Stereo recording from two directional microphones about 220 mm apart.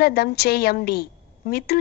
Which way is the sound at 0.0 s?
45° left (ahead or behind).